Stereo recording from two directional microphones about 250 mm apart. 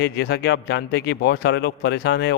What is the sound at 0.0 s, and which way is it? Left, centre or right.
Speech, left.